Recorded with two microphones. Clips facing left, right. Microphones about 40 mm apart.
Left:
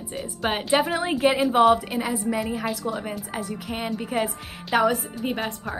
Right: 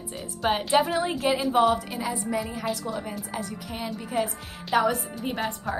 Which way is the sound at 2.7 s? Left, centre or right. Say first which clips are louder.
Left 2 dB; centre.